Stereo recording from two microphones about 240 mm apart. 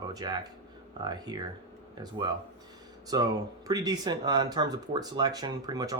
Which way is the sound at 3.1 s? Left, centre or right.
Centre.